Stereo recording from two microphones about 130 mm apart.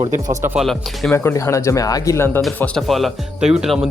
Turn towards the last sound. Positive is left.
turn(degrees=-5)  # may be behind; listen again after turning